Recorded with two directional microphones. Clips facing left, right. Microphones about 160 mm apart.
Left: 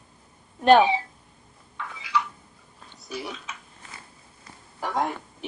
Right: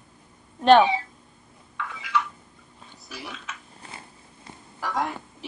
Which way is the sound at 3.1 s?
15° left (ahead or behind).